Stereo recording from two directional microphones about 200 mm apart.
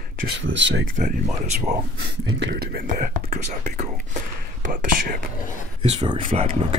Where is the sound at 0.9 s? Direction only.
40° right (ahead or behind).